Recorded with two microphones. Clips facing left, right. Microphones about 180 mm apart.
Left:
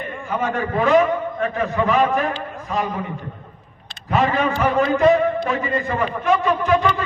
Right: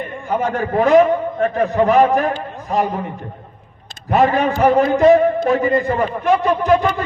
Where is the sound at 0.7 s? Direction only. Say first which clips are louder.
Right 5 dB; 45° right (ahead or behind).